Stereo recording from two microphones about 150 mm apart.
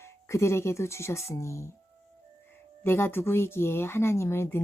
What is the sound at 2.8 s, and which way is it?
Speech, 15° left (ahead or behind).